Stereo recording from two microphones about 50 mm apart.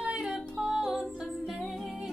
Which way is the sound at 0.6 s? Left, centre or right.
Centre.